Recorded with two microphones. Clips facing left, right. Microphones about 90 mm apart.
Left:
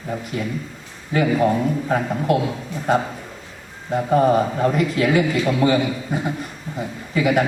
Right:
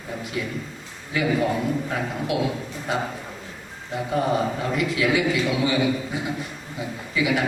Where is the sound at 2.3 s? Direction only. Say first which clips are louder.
Left 5 dB; 45° left (ahead or behind).